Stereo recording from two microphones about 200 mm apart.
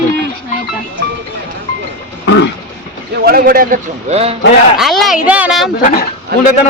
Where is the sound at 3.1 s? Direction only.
50° right (ahead or behind); by 4.3 s 30° right (ahead or behind).